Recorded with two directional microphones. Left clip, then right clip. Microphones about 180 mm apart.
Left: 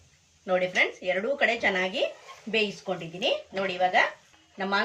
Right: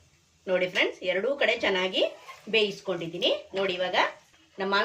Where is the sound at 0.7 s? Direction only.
25° right (ahead or behind).